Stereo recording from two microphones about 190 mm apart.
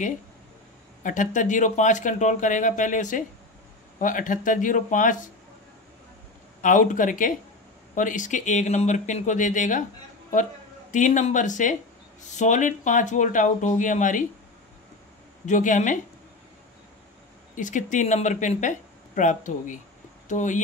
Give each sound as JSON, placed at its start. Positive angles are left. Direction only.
{"t": 1.0, "sound": "speech", "side_deg": 40}
{"t": 6.6, "sound": "speech", "side_deg": 45}
{"t": 10.9, "sound": "speech", "side_deg": 40}
{"t": 15.4, "sound": "speech", "side_deg": 40}
{"t": 17.6, "sound": "speech", "side_deg": 40}